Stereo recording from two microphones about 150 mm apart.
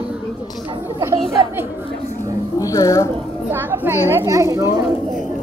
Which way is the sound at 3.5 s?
15° right (ahead or behind).